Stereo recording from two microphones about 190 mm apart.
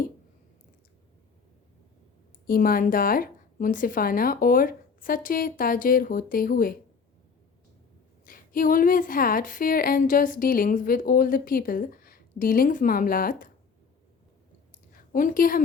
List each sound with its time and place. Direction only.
2.5 s speech: 50° left (ahead or behind)
8.2 s speech: 45° left (ahead or behind)
15.1 s speech: 45° left (ahead or behind)